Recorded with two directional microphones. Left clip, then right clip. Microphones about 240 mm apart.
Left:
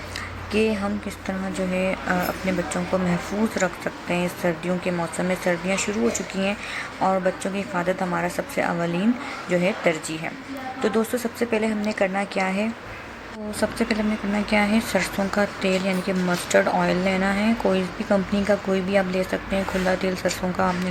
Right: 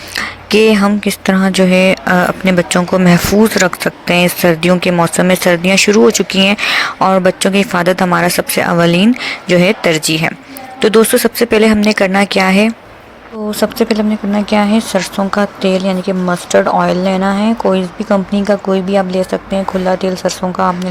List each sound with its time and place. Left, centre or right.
0.2 s speech: right
13.6 s speech: right